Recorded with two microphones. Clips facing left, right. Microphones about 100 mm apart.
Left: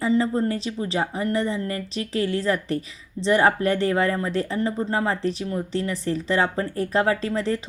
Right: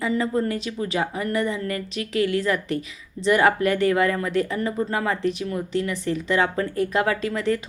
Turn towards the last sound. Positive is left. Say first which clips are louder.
# even
turn(degrees=30)  # may be behind; listen again after turning